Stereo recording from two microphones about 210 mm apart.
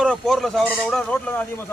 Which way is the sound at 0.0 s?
Centre (ahead or behind).